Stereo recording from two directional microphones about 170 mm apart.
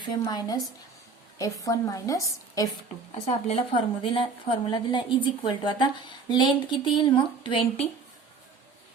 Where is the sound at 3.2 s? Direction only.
40° left (ahead or behind).